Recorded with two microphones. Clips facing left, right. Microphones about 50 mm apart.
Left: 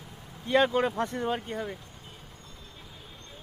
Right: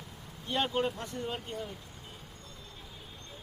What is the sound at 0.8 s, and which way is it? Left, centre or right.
Speech, left.